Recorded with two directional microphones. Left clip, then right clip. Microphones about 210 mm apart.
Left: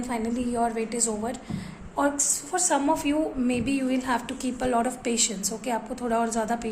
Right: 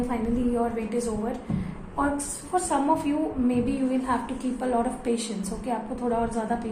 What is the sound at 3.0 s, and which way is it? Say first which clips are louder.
A woman's voice: left 1 dB; 50° left (ahead or behind).